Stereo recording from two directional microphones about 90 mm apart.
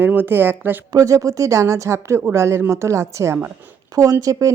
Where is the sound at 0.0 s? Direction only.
25° right (ahead or behind).